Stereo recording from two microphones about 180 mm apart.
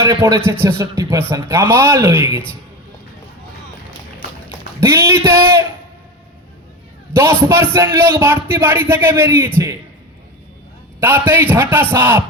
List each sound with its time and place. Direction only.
0.0 s a man's voice: 15° right (ahead or behind)
4.8 s a man's voice: 15° right (ahead or behind)
7.1 s a man's voice: 15° right (ahead or behind)
11.0 s a man's voice: 10° right (ahead or behind)